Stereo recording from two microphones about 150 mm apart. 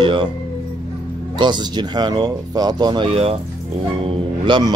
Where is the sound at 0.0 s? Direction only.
35° right (ahead or behind).